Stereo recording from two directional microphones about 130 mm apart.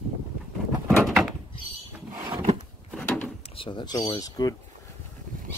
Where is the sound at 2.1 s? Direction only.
35° right (ahead or behind).